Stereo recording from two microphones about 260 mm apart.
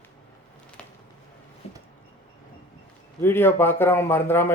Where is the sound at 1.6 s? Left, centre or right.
Left.